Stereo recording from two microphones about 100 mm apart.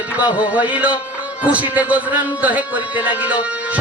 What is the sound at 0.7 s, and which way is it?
Music, 15° right (ahead or behind).